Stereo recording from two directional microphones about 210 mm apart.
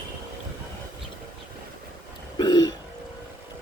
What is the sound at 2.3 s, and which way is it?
Throat clearing, 20° left (ahead or behind).